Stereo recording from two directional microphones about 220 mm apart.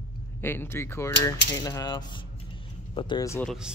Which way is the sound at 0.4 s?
10° left (ahead or behind).